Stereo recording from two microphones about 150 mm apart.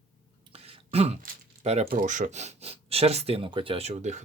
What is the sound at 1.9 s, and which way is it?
Speech, 60° right (ahead or behind).